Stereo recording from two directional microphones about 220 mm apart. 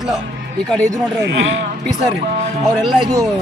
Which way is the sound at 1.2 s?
55° right (ahead or behind).